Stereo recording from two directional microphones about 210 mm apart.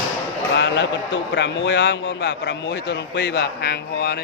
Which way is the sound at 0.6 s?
55° left (ahead or behind).